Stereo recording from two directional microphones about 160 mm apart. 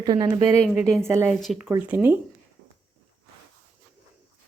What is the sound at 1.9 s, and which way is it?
Speech, 10° right (ahead or behind).